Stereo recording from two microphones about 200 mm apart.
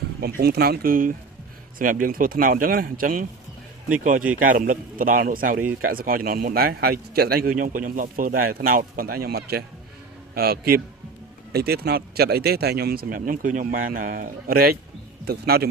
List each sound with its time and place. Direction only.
0.2 s a man's voice: 50° right (ahead or behind)
4.4 s a man's voice: 40° right (ahead or behind)